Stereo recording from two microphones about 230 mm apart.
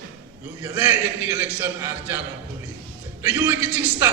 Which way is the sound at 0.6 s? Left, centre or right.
Centre.